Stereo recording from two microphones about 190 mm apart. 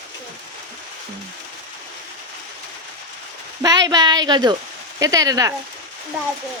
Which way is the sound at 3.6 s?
20° right (ahead or behind).